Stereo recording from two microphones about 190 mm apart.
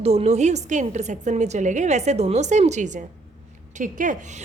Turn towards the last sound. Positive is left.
turn(degrees=-45)  # may be behind; listen again after turning